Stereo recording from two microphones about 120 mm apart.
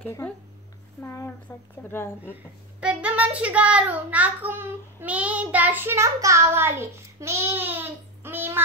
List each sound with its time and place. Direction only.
0.0 s speech: 15° left (ahead or behind)
2.8 s a child's voice: 10° right (ahead or behind)